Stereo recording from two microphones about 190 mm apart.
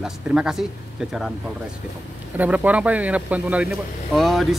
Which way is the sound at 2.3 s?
10° right (ahead or behind).